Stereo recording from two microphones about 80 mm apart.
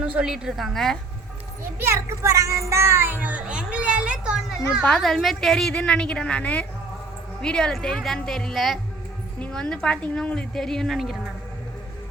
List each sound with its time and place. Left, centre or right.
0.0 s a woman's voice: centre
1.8 s speech: right; by 4.5 s centre
4.9 s a woman's voice: centre